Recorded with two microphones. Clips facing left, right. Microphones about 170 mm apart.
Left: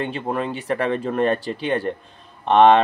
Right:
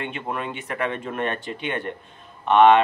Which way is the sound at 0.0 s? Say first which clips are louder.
Left 5 dB; 35° left (ahead or behind).